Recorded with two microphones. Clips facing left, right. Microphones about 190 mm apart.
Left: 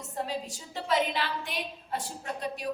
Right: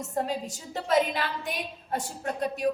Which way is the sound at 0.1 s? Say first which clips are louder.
Right 3 dB; 45° right (ahead or behind).